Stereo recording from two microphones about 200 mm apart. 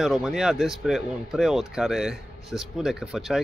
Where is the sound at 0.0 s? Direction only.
Centre (ahead or behind).